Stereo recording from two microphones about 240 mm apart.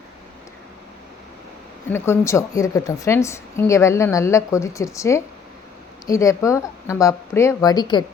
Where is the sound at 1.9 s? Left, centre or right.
Centre.